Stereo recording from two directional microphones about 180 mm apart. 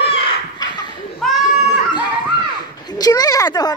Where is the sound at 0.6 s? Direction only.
25° left (ahead or behind).